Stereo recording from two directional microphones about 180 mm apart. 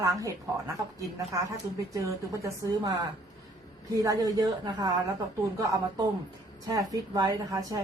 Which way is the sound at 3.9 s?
20° right (ahead or behind).